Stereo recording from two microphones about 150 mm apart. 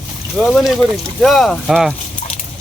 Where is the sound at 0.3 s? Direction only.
Centre (ahead or behind).